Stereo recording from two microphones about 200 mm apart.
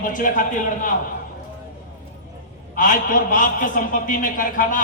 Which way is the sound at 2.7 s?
40° left (ahead or behind).